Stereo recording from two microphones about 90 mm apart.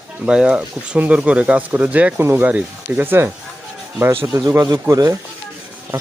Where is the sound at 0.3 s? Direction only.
10° right (ahead or behind); by 4.3 s 25° right (ahead or behind).